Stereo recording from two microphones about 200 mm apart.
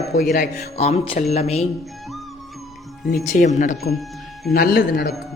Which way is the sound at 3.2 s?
40° left (ahead or behind).